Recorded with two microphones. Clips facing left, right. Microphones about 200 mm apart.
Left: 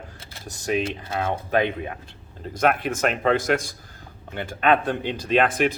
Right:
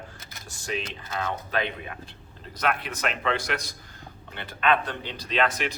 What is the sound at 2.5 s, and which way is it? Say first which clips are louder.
Speech: left 7 dB; 50° left (ahead or behind).